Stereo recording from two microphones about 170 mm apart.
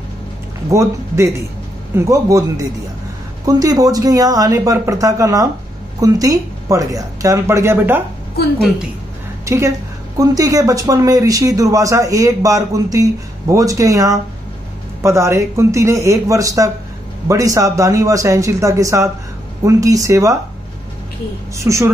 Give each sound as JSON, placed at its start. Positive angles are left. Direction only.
{"t": 0.7, "sound": "speech", "side_deg": -15}
{"t": 9.4, "sound": "speech", "side_deg": -20}
{"t": 21.5, "sound": "speech", "side_deg": -15}